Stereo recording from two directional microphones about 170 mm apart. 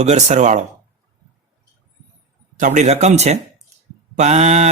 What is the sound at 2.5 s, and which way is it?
Speech, 45° right (ahead or behind).